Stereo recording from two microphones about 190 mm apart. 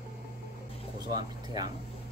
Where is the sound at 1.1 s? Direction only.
20° right (ahead or behind).